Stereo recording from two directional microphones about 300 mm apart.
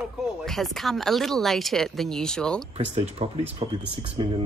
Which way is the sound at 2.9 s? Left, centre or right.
Right.